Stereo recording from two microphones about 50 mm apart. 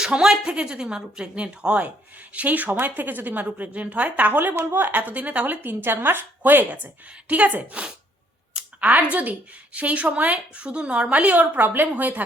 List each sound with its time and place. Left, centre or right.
0.0 s a woman's voice: centre; by 5.5 s right
5.6 s a woman's voice: right